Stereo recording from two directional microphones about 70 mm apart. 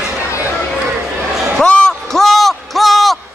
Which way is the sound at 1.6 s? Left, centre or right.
Centre.